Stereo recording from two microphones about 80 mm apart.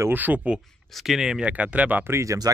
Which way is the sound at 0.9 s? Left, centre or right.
Centre.